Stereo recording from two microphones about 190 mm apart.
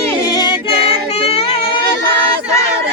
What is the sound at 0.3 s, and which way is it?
Music, 25° left (ahead or behind).